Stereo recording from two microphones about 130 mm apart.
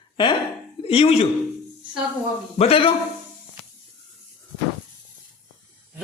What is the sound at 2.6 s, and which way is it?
Speech, 45° left (ahead or behind).